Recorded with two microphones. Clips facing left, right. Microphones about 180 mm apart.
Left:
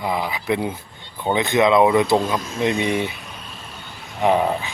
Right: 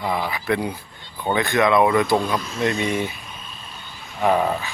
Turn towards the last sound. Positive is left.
turn(degrees=20)  # may be behind; listen again after turning